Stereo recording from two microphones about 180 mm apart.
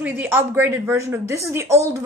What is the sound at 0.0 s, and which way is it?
Speech, 10° right (ahead or behind).